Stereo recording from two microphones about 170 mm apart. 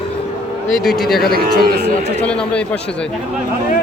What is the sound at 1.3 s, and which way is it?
Speech, 60° right (ahead or behind).